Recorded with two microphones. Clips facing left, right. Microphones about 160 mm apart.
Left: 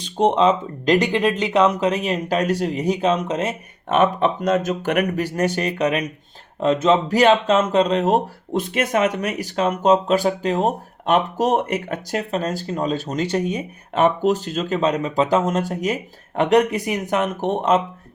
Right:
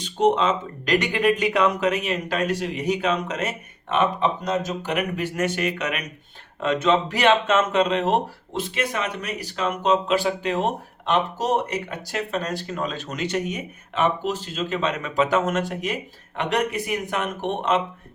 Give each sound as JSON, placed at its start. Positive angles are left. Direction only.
{"t": 0.2, "sound": "speech", "side_deg": 30}
{"t": 3.8, "sound": "speech", "side_deg": 45}
{"t": 13.9, "sound": "speech", "side_deg": 45}